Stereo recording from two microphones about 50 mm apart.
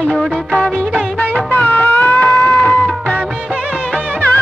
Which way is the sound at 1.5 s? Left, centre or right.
Left.